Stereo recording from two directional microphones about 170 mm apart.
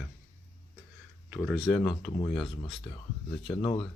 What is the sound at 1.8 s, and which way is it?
Speech, 25° left (ahead or behind).